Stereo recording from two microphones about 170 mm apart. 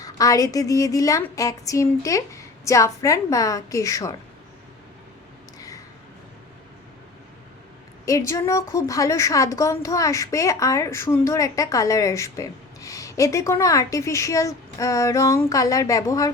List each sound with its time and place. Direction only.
0.0 s a woman's voice: 20° left (ahead or behind)
5.5 s a sound: 20° left (ahead or behind)
8.0 s a woman's voice: 20° left (ahead or behind)